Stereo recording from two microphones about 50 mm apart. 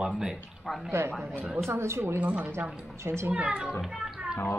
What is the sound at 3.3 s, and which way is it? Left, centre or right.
Speech, right.